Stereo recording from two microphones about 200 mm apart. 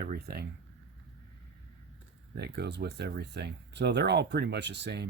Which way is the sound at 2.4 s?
55° right (ahead or behind).